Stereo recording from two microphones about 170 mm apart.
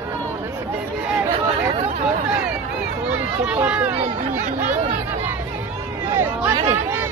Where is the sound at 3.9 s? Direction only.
40° right (ahead or behind).